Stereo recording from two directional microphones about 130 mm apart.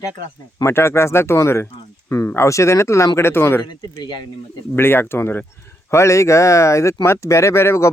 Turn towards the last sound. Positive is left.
turn(degrees=20)  # may be behind; listen again after turning